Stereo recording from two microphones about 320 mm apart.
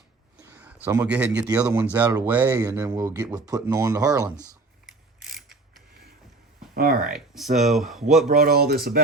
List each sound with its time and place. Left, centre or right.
0.4 s a sound: centre
0.9 s speech: centre
4.9 s mechanisms: centre
6.7 s speech: right
7.1 s speech: centre
8.3 s speech: right